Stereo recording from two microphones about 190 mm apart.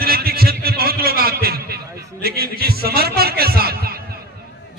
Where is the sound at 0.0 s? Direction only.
55° right (ahead or behind).